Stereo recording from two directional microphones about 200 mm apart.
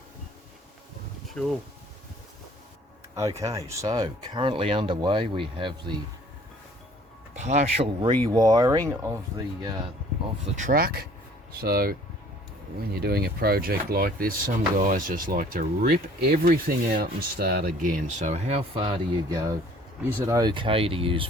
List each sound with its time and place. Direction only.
1.3 s speech: 5° left (ahead or behind)
3.2 s speech: 15° right (ahead or behind)
7.3 s speech: 35° right (ahead or behind); by 8.8 s 20° right (ahead or behind)
10.4 s speech: 40° right (ahead or behind); by 21.2 s 25° right (ahead or behind)